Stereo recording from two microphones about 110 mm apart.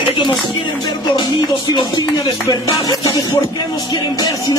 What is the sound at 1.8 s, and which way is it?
Speech, 40° left (ahead or behind).